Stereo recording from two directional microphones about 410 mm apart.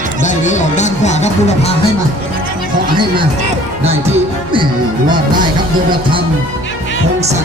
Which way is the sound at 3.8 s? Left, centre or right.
Centre.